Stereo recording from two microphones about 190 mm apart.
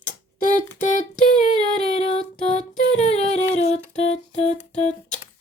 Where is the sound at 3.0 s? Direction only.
35° left (ahead or behind).